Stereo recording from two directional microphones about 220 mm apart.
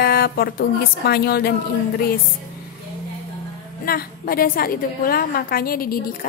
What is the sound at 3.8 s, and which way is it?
A woman's voice, 40° left (ahead or behind).